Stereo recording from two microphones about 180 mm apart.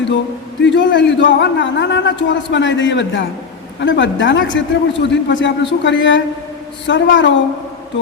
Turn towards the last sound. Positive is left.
turn(degrees=90)